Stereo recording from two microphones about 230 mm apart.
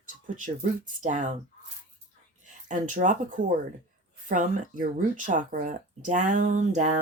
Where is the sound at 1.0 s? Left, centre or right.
Right.